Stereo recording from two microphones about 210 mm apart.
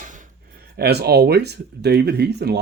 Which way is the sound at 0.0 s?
35° right (ahead or behind).